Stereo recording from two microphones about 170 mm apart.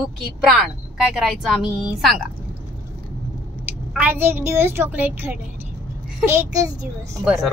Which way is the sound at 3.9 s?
10° right (ahead or behind).